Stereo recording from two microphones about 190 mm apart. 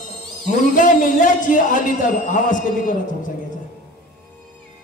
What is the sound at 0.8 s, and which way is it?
A man's voice, 45° left (ahead or behind).